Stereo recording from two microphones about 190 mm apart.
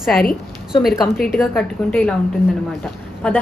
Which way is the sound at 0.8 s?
Centre (ahead or behind).